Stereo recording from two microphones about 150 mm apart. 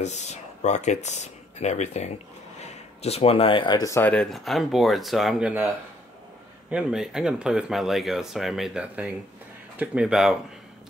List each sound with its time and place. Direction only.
0.0 s speech: 50° left (ahead or behind); by 4.1 s 20° left (ahead or behind)
4.1 s speech: centre (ahead or behind)
6.7 s speech: 5° right (ahead or behind)